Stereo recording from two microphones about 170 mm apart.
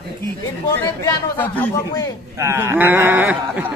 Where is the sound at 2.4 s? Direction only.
15° right (ahead or behind).